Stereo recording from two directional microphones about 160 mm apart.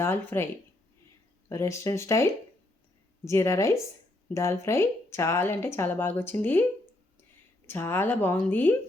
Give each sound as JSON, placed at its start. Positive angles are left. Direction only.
{"t": 0.0, "sound": "speech", "side_deg": 15}
{"t": 1.5, "sound": "speech", "side_deg": 15}
{"t": 7.7, "sound": "speech", "side_deg": 15}